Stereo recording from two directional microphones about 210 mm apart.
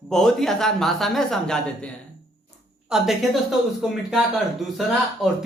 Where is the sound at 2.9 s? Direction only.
Centre (ahead or behind).